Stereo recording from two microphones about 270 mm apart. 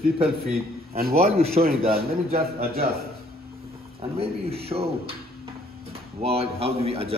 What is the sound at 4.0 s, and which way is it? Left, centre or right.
A man's voice, right.